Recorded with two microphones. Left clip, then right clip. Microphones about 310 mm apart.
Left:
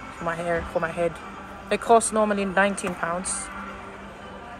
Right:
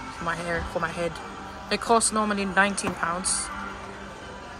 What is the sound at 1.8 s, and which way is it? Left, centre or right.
Speech, centre.